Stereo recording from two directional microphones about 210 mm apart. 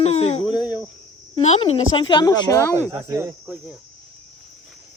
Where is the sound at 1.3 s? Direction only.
30° left (ahead or behind).